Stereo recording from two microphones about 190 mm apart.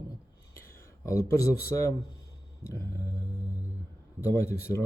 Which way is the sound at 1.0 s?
15° left (ahead or behind).